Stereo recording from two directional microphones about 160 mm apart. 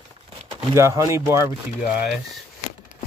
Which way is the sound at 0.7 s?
20° right (ahead or behind).